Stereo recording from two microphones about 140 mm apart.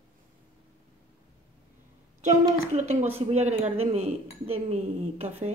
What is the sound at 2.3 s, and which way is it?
A woman's voice, 55° right (ahead or behind).